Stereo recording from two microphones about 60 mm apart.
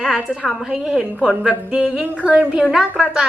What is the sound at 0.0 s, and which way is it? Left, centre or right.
Speech, centre.